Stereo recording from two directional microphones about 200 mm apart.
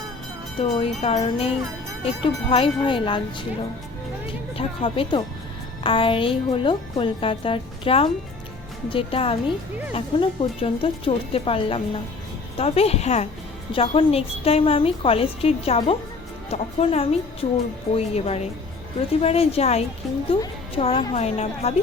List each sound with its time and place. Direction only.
0.6 s speech: 30° left (ahead or behind)